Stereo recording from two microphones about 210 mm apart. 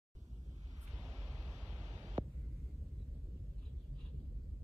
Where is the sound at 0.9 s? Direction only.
5° right (ahead or behind).